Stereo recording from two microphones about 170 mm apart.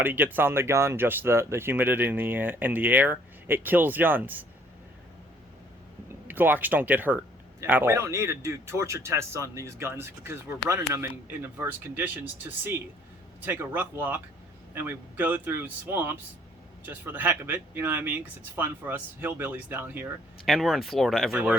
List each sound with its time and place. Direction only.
0.0 s speech: 10° right (ahead or behind)
6.1 s speech: 10° right (ahead or behind)
20.4 s speech: centre (ahead or behind)